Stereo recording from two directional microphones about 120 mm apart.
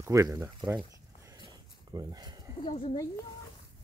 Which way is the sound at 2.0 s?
35° right (ahead or behind).